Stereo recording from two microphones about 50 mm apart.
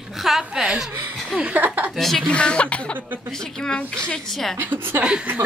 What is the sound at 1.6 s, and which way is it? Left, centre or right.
Speech, right.